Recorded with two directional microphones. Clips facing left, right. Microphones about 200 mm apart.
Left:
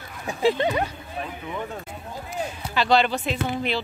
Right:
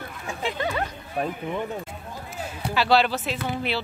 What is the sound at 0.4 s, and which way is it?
Speech, 35° left (ahead or behind).